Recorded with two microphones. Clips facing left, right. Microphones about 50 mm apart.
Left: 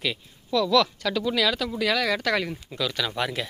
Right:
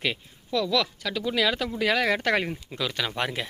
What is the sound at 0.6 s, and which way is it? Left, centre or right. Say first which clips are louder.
Speech: left 5 dB; centre.